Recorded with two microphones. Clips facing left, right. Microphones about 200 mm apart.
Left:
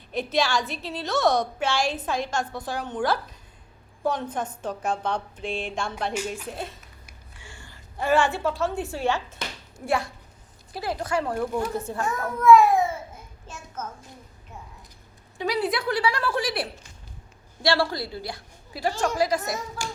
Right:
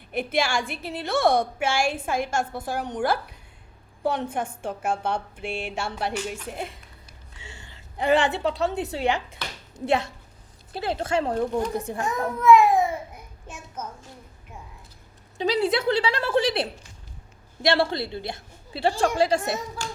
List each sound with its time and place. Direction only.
0.3 s a woman's voice: 10° right (ahead or behind)
0.8 s a woman's voice: 55° right (ahead or behind)
1.0 s a woman's voice: 10° right (ahead or behind)
15.4 s a woman's voice: 25° right (ahead or behind)
19.8 s a sound: 10° left (ahead or behind)